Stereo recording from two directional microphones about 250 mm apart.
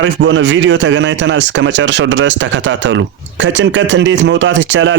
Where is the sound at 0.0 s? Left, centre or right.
Right.